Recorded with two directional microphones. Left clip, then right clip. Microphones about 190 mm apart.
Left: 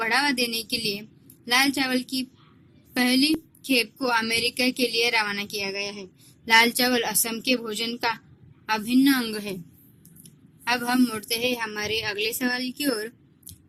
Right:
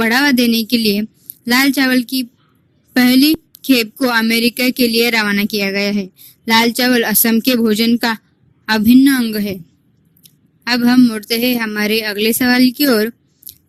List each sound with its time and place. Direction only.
0.0 s a woman's voice: 50° right (ahead or behind)